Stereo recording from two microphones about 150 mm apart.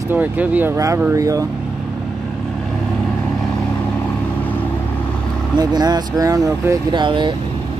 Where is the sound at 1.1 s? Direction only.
20° right (ahead or behind).